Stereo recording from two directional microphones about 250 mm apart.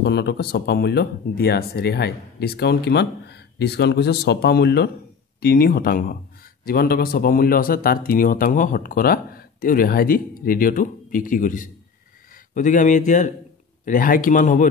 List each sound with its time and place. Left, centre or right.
0.0 s speech: left